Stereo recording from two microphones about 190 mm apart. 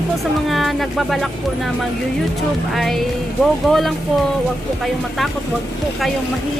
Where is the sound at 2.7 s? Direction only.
Centre (ahead or behind).